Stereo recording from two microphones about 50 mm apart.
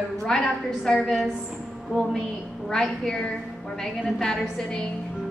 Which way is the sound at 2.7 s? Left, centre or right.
Centre.